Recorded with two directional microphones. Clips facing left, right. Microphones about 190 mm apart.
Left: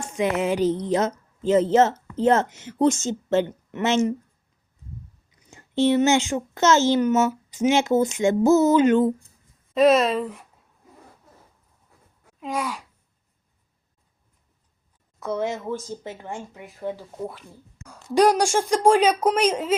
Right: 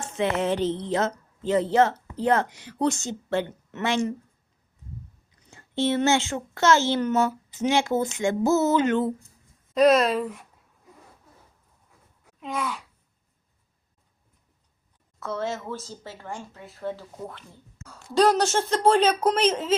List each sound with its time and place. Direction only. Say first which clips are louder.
0.0 s a woman's voice: left 2 dB; 10° left (ahead or behind)
5.8 s speech: left 4 dB; 15° left (ahead or behind)
9.7 s a woman's voice: left 1 dB; centre (ahead or behind)
15.2 s speech: left 3 dB; 15° left (ahead or behind)